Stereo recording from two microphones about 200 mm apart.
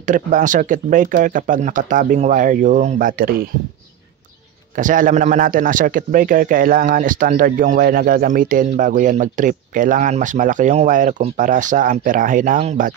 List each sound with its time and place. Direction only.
0.0 s speech: 40° right (ahead or behind)
4.7 s speech: 40° right (ahead or behind)